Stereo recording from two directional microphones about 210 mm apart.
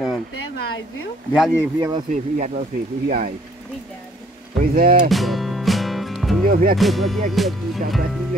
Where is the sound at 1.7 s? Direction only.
20° right (ahead or behind).